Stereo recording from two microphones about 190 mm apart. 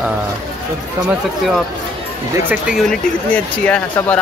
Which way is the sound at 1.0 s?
Centre (ahead or behind).